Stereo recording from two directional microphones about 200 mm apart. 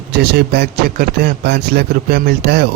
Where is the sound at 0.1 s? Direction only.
55° right (ahead or behind).